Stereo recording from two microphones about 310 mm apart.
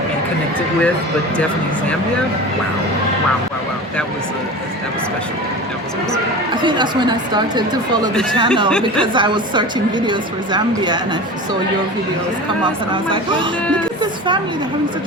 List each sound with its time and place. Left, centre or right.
6.6 s a woman's voice: centre
12.9 s a woman's voice: centre